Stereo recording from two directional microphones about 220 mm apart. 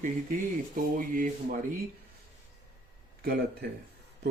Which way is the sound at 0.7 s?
40° right (ahead or behind).